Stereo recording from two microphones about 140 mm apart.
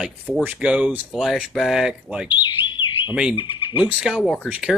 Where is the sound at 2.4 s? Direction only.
35° left (ahead or behind).